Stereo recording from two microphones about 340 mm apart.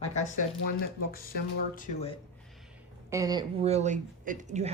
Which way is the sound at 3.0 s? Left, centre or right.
Centre.